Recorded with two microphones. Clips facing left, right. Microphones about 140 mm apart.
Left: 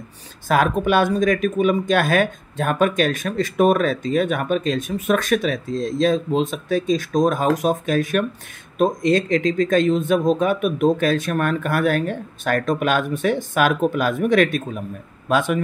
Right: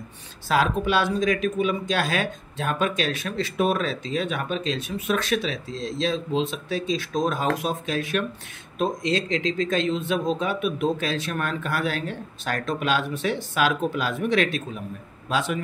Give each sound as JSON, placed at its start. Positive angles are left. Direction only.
{"t": 0.5, "sound": "speech", "side_deg": 50}